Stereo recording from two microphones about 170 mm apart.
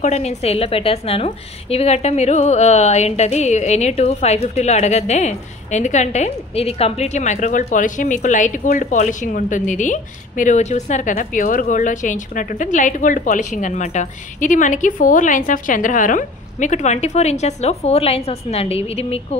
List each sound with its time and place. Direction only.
0.0 s a woman's voice: 40° left (ahead or behind)